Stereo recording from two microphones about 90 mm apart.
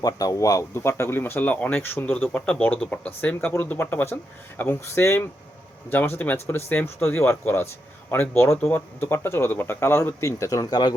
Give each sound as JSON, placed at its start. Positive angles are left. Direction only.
{"t": 0.0, "sound": "speech", "side_deg": 40}
{"t": 0.7, "sound": "speech", "side_deg": 30}